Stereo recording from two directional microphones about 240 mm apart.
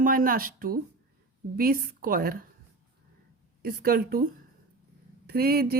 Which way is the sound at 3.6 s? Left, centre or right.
Right.